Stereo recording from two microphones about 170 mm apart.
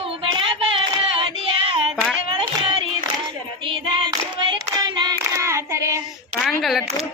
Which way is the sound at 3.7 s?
30° right (ahead or behind).